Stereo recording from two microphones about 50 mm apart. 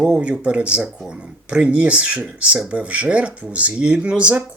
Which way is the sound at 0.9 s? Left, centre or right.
Centre.